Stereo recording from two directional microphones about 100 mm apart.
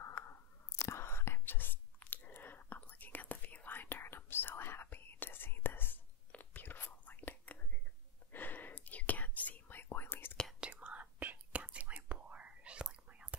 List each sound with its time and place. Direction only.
0.0 s whispering: 25° left (ahead or behind)
10.6 s whispering: 15° right (ahead or behind)